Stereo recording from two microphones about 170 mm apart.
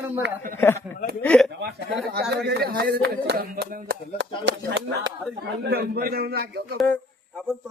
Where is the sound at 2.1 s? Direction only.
70° right (ahead or behind).